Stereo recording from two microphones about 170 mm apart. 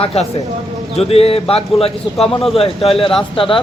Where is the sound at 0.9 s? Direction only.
35° left (ahead or behind).